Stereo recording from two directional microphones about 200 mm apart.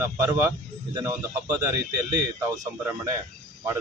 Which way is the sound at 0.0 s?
10° right (ahead or behind).